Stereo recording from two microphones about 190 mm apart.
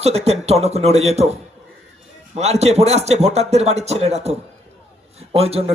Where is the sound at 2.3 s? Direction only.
35° right (ahead or behind).